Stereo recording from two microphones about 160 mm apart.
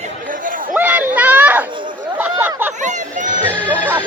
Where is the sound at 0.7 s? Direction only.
10° right (ahead or behind).